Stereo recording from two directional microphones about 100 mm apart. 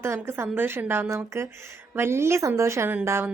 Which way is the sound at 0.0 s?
25° right (ahead or behind).